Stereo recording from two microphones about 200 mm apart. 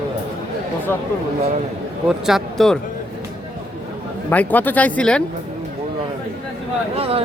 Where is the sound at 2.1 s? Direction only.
Centre (ahead or behind).